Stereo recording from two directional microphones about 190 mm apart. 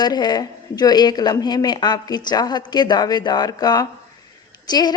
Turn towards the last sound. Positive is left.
turn(degrees=20)  # may be behind; listen again after turning